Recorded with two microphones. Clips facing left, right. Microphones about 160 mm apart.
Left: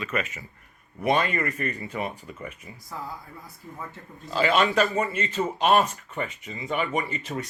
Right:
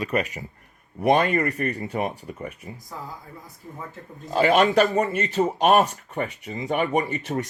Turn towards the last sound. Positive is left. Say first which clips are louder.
# right 4 dB
turn(degrees=-40)  # may be behind; listen again after turning